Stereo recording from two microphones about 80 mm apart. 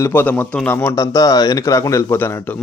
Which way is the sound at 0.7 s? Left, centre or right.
Left.